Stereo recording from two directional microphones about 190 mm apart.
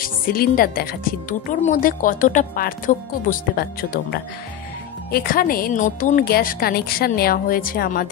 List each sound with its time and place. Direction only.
0.0 s a woman's voice: 50° left (ahead or behind)